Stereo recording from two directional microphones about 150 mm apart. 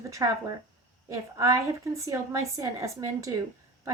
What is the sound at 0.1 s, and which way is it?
A woman's voice, 25° right (ahead or behind).